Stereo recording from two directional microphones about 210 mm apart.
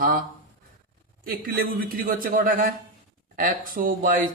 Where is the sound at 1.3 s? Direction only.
45° right (ahead or behind).